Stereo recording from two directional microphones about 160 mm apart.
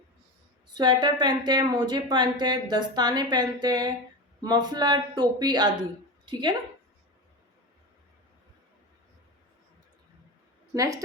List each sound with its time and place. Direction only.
0.7 s a woman's voice: 25° right (ahead or behind)
10.8 s speech: 20° right (ahead or behind)